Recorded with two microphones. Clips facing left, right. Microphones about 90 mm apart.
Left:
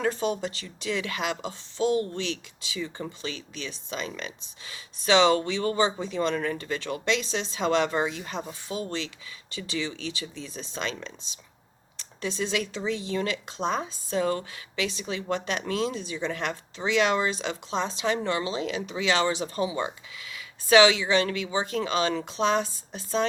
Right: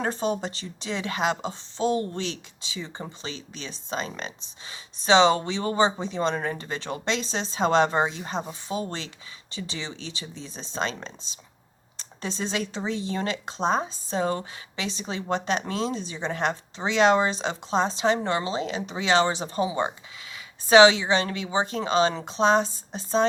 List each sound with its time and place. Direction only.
0.0 s speech: 35° right (ahead or behind)